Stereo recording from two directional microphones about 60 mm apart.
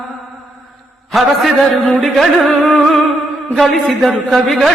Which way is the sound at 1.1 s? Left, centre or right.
Centre.